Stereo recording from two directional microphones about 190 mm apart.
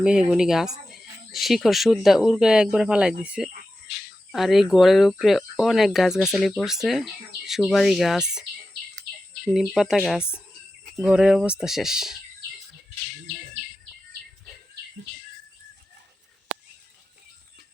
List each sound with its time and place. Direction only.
0.0 s speech: 5° right (ahead or behind)
9.5 s speech: centre (ahead or behind)